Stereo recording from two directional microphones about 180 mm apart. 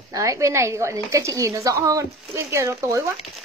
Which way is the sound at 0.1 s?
15° right (ahead or behind).